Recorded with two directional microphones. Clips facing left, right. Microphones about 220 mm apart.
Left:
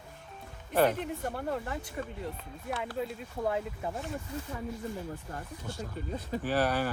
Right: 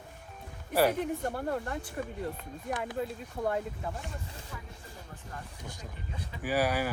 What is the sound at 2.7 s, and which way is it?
Speech, 15° right (ahead or behind).